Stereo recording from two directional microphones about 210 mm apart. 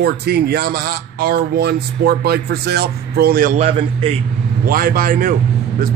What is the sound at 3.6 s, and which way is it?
Speech, 25° right (ahead or behind).